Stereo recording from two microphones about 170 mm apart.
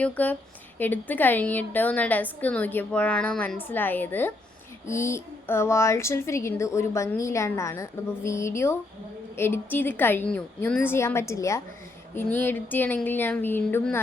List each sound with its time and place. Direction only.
0.0 s a woman's voice: 10° left (ahead or behind)